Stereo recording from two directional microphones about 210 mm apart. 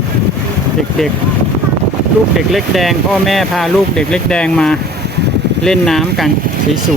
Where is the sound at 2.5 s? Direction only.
Centre (ahead or behind).